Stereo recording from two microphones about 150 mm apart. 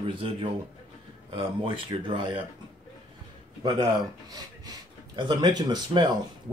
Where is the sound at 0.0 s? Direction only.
35° right (ahead or behind).